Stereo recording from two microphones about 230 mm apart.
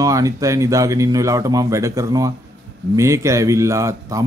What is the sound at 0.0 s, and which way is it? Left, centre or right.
Speech, centre.